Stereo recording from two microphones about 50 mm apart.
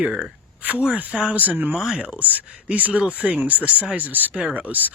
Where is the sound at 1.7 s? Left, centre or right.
Centre.